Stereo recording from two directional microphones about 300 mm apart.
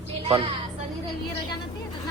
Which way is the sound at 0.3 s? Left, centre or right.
Centre.